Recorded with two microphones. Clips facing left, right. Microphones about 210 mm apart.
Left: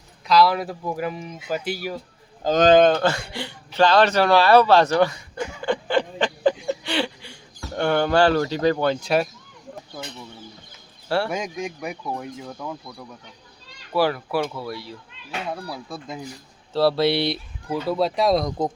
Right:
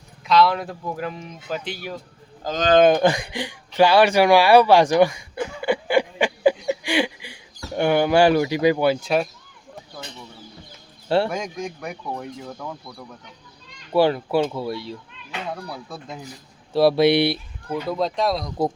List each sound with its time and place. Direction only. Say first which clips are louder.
0.3 s speech: even; centre (ahead or behind)
2.4 s speech: left 7 dB; 25° left (ahead or behind)
2.8 s a sound: right 2 dB; 15° right (ahead or behind)
7.8 s speech: right 2 dB; 10° right (ahead or behind)
11.3 s speech: even; 5° left (ahead or behind)
13.9 s speech: right 4 dB; 25° right (ahead or behind)
15.6 s speech: left 1 dB; centre (ahead or behind)
16.7 s speech: right 3 dB; 15° right (ahead or behind)
17.7 s speech: left 1 dB; 5° left (ahead or behind)
18.6 s speech: right 2 dB; 10° right (ahead or behind)